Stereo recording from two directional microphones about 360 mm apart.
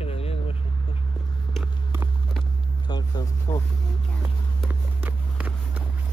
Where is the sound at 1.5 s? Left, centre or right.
Centre.